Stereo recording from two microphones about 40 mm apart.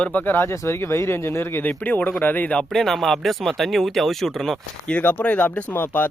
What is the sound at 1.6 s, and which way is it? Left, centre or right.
Speech, left.